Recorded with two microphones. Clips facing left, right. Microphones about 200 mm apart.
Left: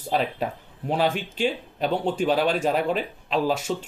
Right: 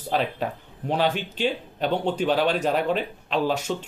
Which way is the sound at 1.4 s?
5° left (ahead or behind).